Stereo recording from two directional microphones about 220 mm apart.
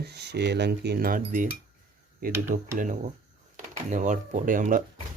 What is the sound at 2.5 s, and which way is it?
Speech, 35° right (ahead or behind).